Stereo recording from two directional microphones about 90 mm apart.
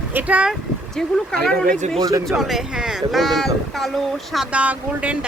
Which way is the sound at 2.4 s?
5° right (ahead or behind).